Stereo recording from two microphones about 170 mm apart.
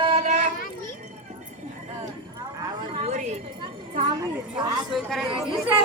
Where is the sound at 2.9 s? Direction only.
35° right (ahead or behind).